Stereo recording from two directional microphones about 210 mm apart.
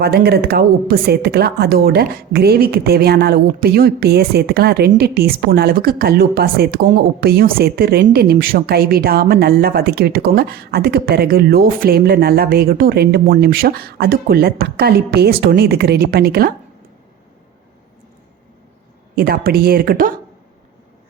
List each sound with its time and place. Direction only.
0.0 s a woman's voice: 50° right (ahead or behind)
19.1 s a woman's voice: 45° right (ahead or behind)